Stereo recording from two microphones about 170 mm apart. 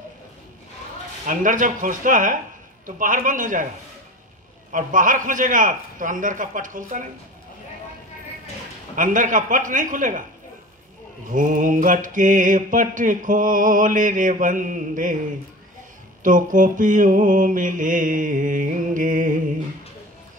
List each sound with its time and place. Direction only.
1.2 s mantra: 50° right (ahead or behind)
4.7 s mantra: 50° right (ahead or behind)
8.9 s mantra: 50° right (ahead or behind)
11.2 s mantra: 50° right (ahead or behind)
16.2 s mantra: 50° right (ahead or behind)